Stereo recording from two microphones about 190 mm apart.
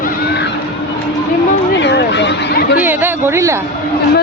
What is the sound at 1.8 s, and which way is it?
Speech, 65° left (ahead or behind).